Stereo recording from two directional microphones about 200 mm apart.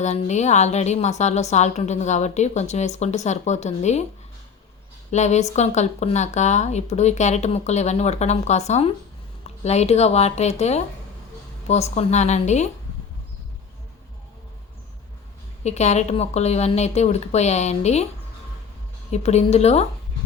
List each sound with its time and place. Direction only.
0.0 s speech: 35° left (ahead or behind)
5.1 s speech: 35° left (ahead or behind)
15.6 s speech: 35° left (ahead or behind)
19.1 s speech: 35° left (ahead or behind)